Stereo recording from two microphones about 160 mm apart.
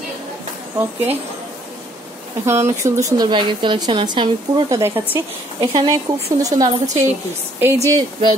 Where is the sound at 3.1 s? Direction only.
25° right (ahead or behind).